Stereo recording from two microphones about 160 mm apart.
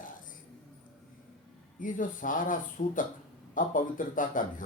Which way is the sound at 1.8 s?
55° left (ahead or behind).